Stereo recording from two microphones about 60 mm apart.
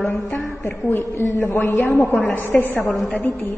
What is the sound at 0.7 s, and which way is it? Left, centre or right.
A woman's voice, left.